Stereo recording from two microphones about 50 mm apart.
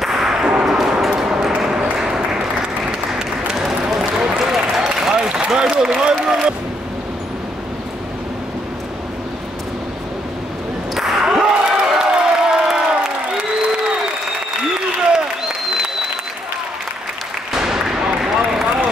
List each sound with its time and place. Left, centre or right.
0.0 s whip: centre
0.7 s bow-wow: centre
1.0 s ping: centre
2.0 s applause: centre
5.9 s a sound: centre
11.0 s basketball bounce: centre
11.9 s a sound: centre
15.1 s applause: centre
17.5 s a sound: centre